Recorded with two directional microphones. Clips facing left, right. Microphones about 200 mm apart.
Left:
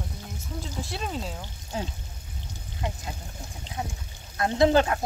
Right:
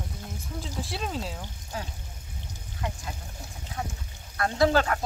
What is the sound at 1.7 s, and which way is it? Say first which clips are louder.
Speech: left 4 dB; 25° left (ahead or behind).